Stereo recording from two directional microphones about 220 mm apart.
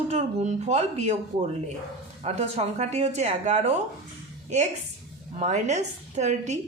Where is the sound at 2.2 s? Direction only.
30° right (ahead or behind).